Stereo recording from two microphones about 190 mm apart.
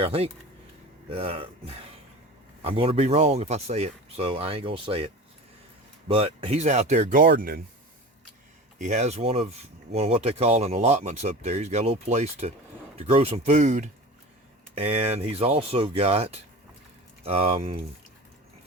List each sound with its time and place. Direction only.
0.0 s speech: 30° right (ahead or behind)
7.3 s speech: 55° right (ahead or behind)
8.8 s speech: 35° right (ahead or behind)